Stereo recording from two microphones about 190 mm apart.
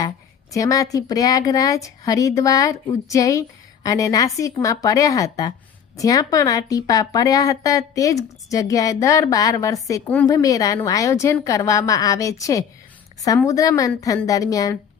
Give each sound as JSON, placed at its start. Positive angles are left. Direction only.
{"t": 0.5, "sound": "a woman's voice", "side_deg": 15}